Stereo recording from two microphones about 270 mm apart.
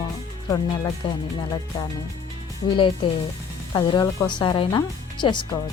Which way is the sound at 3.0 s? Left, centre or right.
Centre.